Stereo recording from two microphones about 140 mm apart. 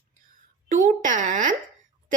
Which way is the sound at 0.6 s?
70° right (ahead or behind).